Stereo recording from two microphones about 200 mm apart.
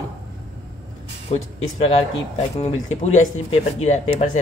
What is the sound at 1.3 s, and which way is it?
Speech, 30° left (ahead or behind).